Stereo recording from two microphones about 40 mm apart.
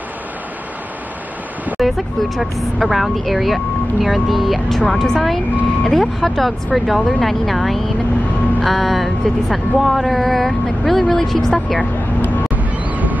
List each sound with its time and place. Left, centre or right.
1.8 s speech: centre
12.2 s vehicle: left
12.5 s a sound: right